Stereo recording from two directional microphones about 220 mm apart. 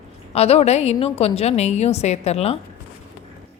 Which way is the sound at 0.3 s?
30° left (ahead or behind).